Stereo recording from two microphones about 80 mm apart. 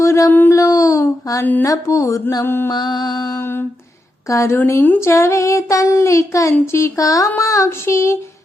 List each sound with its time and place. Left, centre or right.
0.0 s speech: left
0.3 s speech: left
0.5 s a sound: left
2.4 s speech: left
2.6 s music: left
3.3 s speech: left
4.3 s speech: left
4.5 s speech: left
4.9 s speech: left